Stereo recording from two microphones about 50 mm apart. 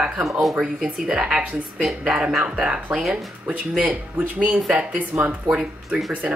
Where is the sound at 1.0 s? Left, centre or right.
Centre.